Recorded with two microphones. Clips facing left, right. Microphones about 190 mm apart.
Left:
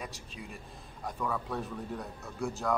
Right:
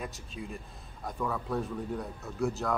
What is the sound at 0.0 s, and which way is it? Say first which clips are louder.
Speech: right 3 dB; centre (ahead or behind).